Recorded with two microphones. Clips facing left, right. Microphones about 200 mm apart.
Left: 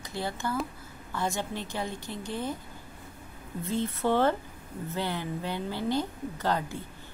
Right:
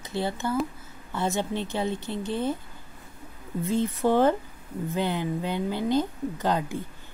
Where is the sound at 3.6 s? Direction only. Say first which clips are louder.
Right 4 dB; 15° right (ahead or behind).